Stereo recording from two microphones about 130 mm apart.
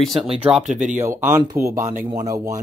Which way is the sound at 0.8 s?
15° right (ahead or behind).